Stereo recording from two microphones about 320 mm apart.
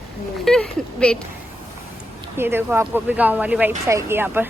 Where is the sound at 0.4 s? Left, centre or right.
Centre.